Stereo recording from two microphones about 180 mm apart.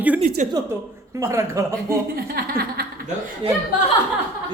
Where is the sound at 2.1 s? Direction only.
55° right (ahead or behind).